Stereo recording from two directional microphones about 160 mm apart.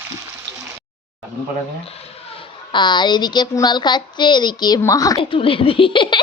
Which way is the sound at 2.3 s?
30° left (ahead or behind).